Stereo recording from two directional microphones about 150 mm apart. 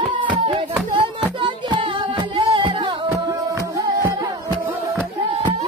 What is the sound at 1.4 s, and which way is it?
Music, 35° right (ahead or behind).